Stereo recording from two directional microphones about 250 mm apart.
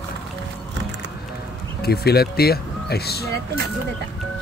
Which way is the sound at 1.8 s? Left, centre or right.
Left.